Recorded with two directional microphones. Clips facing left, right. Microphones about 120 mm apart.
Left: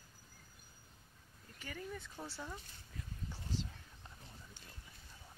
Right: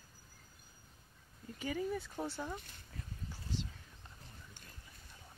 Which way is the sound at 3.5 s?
40° left (ahead or behind).